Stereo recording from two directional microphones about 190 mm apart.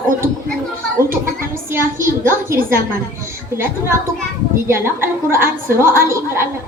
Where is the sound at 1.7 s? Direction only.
15° right (ahead or behind).